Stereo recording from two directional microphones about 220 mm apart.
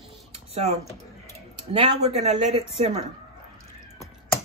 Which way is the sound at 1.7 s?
30° right (ahead or behind).